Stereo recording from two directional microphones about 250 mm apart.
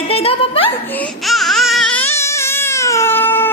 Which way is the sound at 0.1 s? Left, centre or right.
Left.